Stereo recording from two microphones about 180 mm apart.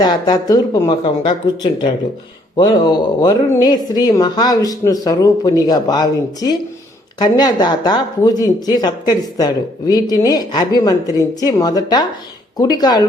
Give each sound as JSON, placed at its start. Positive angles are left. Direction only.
{"t": 0.0, "sound": "a woman's voice", "side_deg": 20}